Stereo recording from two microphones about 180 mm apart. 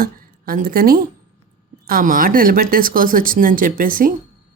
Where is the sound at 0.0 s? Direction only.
55° right (ahead or behind).